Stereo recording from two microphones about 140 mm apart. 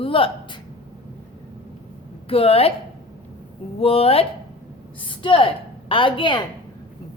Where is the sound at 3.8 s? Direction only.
45° left (ahead or behind).